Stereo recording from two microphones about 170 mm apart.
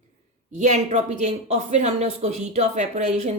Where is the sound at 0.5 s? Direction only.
45° right (ahead or behind).